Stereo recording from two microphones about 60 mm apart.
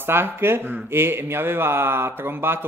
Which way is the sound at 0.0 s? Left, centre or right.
Right.